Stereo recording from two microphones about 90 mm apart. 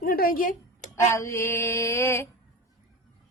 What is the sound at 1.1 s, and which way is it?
Mantra, 35° left (ahead or behind).